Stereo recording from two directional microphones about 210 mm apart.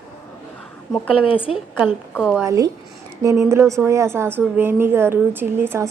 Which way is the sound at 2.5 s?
15° right (ahead or behind).